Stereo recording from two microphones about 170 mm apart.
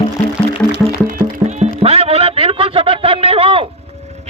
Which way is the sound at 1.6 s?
40° right (ahead or behind).